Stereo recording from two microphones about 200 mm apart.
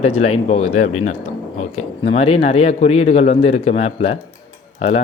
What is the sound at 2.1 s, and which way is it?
Speech, 30° left (ahead or behind).